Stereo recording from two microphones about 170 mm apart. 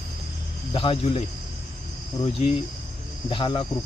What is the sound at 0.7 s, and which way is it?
Speech, 30° left (ahead or behind).